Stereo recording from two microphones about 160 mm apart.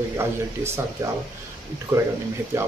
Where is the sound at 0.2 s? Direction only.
15° right (ahead or behind).